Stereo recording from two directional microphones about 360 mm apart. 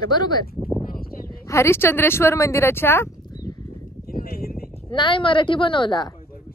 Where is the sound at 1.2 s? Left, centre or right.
Centre.